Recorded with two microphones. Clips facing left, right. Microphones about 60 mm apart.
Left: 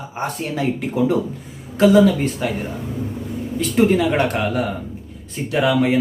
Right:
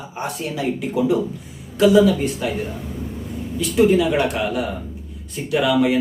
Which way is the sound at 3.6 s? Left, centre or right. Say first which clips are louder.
Right 1 dB; left.